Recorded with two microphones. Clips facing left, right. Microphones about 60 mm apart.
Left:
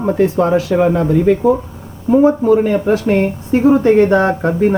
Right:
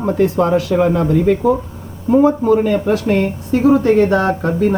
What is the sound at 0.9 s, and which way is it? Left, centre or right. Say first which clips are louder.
Speech: left 1 dB; centre.